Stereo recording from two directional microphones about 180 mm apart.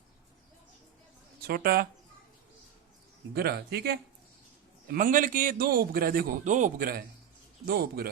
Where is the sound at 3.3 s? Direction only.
60° right (ahead or behind).